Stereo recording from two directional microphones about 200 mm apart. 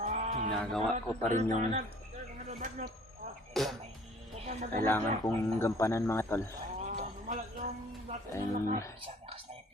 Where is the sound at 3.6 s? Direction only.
Centre (ahead or behind).